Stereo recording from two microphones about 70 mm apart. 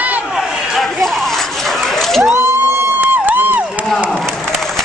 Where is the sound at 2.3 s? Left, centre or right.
Right.